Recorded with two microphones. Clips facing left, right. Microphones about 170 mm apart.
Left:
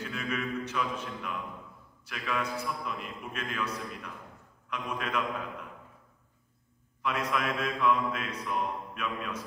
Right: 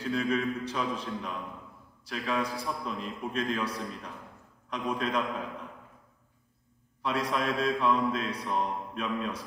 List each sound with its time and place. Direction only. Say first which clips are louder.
0.0 s a man's voice: right 6 dB; 30° right (ahead or behind)
2.0 s mantra: right 3 dB; 35° right (ahead or behind)
7.0 s mantra: right 1 dB; 30° right (ahead or behind)